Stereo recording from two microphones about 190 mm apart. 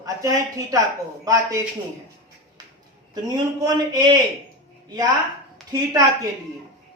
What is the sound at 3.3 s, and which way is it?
Speech, 20° right (ahead or behind).